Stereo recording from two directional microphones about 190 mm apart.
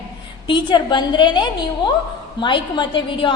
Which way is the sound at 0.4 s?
25° left (ahead or behind).